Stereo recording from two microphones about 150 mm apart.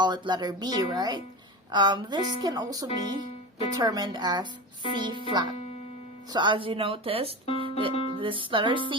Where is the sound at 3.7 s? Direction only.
25° right (ahead or behind).